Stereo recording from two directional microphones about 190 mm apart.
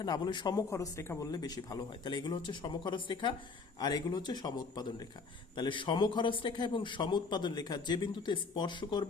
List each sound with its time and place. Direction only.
0.0 s a man's voice: 25° left (ahead or behind)